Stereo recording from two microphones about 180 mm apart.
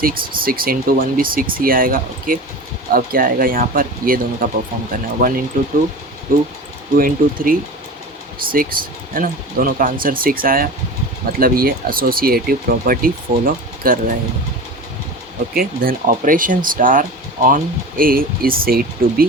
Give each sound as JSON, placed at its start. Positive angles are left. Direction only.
{"t": 0.0, "sound": "speech", "side_deg": -55}
{"t": 15.5, "sound": "speech", "side_deg": -50}